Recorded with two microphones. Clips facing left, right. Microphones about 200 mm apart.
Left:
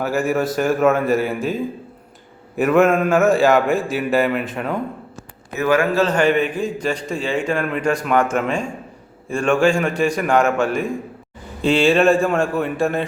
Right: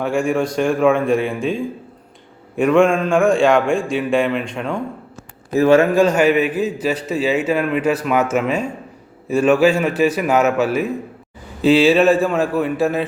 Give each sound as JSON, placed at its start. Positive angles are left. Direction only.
{"t": 0.0, "sound": "a man's voice", "side_deg": 5}
{"t": 5.5, "sound": "a man's voice", "side_deg": -25}
{"t": 5.9, "sound": "a man's voice", "side_deg": -10}